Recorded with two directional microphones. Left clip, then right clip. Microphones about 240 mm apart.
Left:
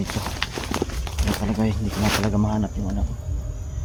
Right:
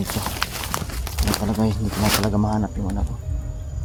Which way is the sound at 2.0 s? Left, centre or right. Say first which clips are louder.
Right 2 dB; centre.